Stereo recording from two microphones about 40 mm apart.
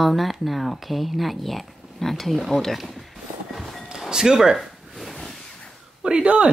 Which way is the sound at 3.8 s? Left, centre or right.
Centre.